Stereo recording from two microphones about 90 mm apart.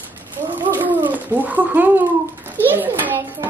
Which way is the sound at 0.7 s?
20° right (ahead or behind).